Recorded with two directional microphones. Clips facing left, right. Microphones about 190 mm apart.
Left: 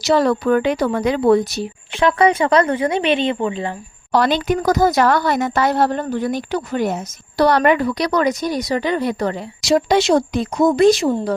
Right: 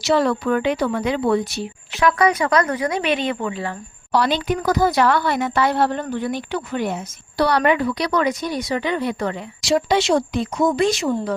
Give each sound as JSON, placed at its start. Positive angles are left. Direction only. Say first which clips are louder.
{"t": 0.0, "sound": "speech", "louder": "left 3 dB", "side_deg": 40}
{"t": 2.0, "sound": "speech", "louder": "left 3 dB", "side_deg": 30}
{"t": 4.1, "sound": "speech", "louder": "left 3 dB", "side_deg": 50}